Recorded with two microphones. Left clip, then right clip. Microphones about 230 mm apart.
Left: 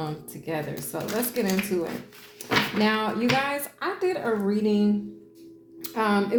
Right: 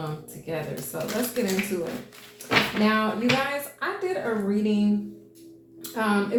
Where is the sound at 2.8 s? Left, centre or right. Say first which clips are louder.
Right 1 dB; left.